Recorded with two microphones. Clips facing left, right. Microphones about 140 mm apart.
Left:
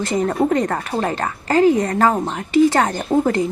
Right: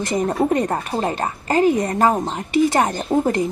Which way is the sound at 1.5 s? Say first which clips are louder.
Left 2 dB; 15° right (ahead or behind).